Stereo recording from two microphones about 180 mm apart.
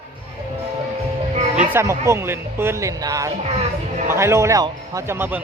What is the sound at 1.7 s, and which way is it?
A man's voice, 15° right (ahead or behind).